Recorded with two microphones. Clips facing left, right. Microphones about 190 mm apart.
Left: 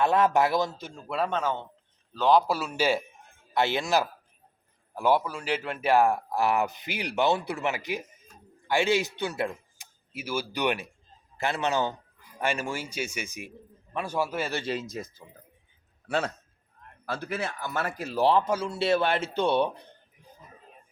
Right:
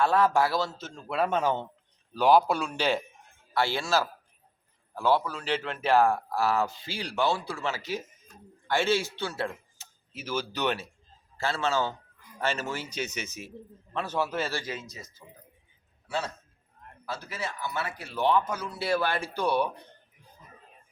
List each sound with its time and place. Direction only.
0.0 s a man's voice: 20° left (ahead or behind)
1.0 s a man's voice: centre (ahead or behind)
1.4 s a man's voice: 15° right (ahead or behind)
2.5 s speech: 5° left (ahead or behind)
3.5 s a man's voice: 20° left (ahead or behind)
14.6 s speech: 30° left (ahead or behind)
16.0 s a man's voice: 60° left (ahead or behind); by 19.7 s 25° left (ahead or behind)